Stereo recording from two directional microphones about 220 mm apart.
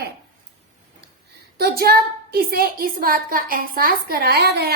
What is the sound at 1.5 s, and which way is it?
A woman's voice, 45° right (ahead or behind).